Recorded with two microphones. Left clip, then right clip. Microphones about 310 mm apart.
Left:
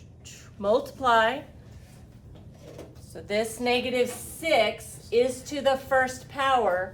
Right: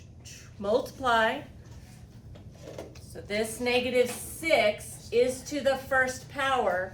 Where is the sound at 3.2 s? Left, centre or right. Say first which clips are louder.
Left 3 dB; centre.